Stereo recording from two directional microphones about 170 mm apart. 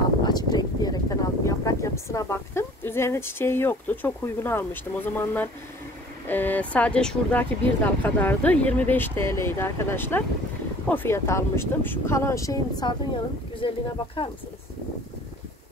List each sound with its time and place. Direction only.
0.2 s speech: 25° left (ahead or behind)